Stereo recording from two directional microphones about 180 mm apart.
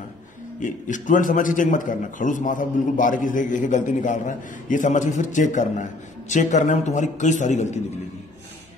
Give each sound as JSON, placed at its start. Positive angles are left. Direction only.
{"t": 0.6, "sound": "a man's voice", "side_deg": 45}